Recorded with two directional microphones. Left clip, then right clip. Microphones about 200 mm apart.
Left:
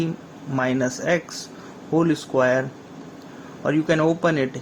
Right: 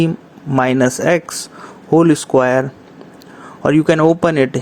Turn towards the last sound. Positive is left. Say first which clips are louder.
# right 8 dB
turn(degrees=-40)  # may be behind; listen again after turning